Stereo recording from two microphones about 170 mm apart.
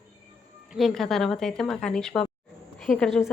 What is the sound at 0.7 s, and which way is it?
A woman's voice, centre (ahead or behind).